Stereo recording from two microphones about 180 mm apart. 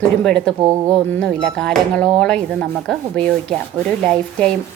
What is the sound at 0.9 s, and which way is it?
Speech, 5° left (ahead or behind).